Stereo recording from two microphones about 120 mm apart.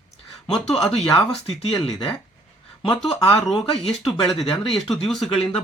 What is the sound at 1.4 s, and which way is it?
Speech, 45° left (ahead or behind).